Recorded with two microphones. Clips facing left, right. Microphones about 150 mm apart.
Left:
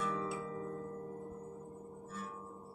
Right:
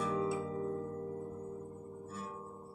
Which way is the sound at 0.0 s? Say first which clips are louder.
Right 4 dB; 25° right (ahead or behind).